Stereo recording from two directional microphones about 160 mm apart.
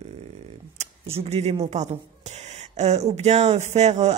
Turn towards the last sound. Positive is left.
turn(degrees=-45)  # may be behind; listen again after turning